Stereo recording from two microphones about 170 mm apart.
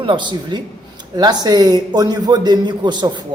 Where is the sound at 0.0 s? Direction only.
30° right (ahead or behind).